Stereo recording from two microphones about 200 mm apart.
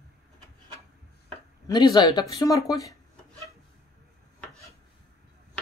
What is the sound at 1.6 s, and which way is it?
Speech, 20° left (ahead or behind).